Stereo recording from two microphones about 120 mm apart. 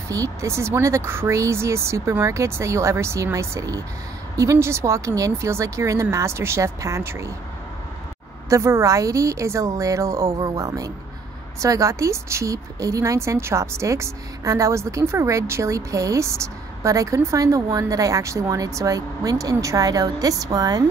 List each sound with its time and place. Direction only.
0.1 s a woman's voice: 25° right (ahead or behind)
8.5 s a woman's voice: 25° right (ahead or behind)